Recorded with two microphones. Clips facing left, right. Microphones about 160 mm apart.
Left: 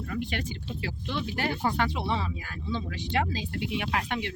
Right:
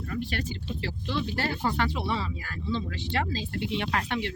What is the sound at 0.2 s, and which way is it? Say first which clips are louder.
Speech: even; 20° left (ahead or behind).